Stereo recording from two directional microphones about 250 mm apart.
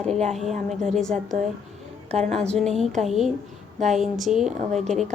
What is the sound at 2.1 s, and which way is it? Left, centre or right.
Speech, right.